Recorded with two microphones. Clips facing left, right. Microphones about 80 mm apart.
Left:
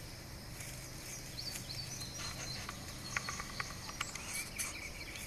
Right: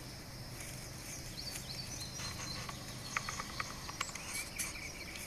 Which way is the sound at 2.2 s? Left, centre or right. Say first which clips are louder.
Right 1 dB; centre.